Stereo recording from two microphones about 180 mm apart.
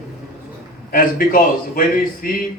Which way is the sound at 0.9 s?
50° left (ahead or behind).